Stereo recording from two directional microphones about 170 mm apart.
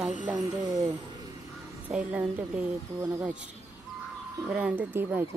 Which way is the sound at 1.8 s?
5° right (ahead or behind).